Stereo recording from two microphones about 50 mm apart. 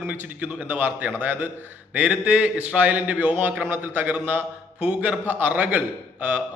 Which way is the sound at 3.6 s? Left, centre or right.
Right.